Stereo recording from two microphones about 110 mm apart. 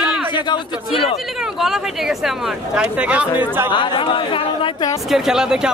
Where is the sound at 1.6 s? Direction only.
5° right (ahead or behind).